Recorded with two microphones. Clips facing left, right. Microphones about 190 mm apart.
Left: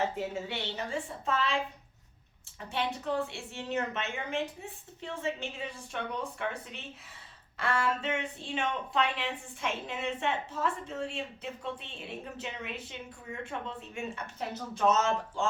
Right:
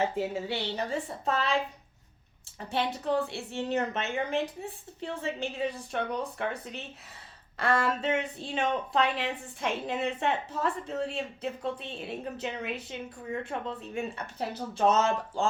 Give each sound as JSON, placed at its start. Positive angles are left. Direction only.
{"t": 0.4, "sound": "speech", "side_deg": -35}
{"t": 2.6, "sound": "speech", "side_deg": -35}